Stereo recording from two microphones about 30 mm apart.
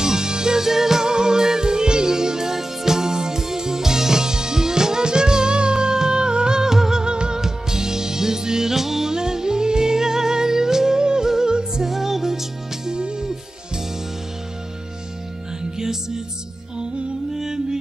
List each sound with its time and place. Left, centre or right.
0.0 s music: right
7.1 s music: right; by 9.1 s centre
9.1 s music: right
11.9 s music: centre
12.9 s music: right
17.4 s music: centre